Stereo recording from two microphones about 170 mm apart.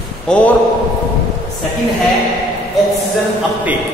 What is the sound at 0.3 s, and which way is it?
Speech, 10° left (ahead or behind).